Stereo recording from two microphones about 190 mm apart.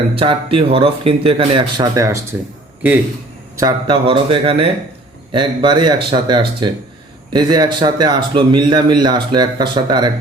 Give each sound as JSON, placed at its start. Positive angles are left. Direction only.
{"t": 0.2, "sound": "speech", "side_deg": -25}
{"t": 3.6, "sound": "speech", "side_deg": -20}